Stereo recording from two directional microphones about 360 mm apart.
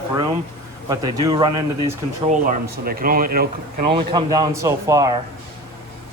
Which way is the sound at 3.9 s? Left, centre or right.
Centre.